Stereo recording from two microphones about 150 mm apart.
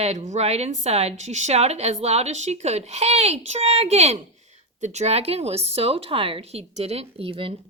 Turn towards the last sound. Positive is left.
turn(degrees=-35)  # may be behind; listen again after turning